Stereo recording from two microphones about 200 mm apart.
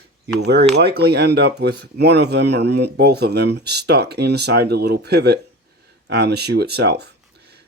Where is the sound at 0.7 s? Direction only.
55° right (ahead or behind).